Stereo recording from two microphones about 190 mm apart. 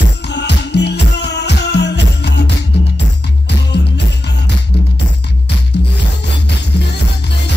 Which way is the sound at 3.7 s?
60° left (ahead or behind).